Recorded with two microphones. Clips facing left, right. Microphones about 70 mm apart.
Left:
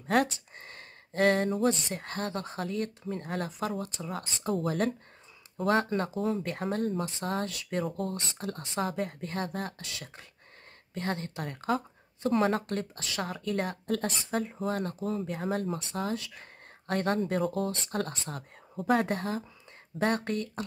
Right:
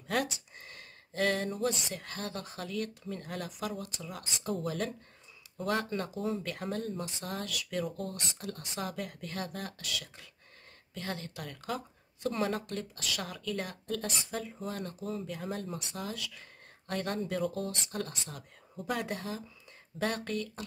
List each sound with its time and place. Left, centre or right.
0.0 s a sound: left
1.5 s speech: left
5.9 s speech: left
11.0 s speech: left